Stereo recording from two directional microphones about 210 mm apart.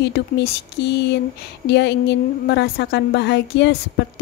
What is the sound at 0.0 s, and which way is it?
A woman's voice, 50° left (ahead or behind).